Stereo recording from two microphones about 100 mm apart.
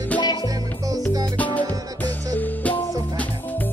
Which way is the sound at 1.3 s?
15° left (ahead or behind).